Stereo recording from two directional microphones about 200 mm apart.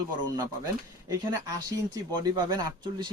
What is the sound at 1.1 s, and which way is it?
Speech, 15° right (ahead or behind).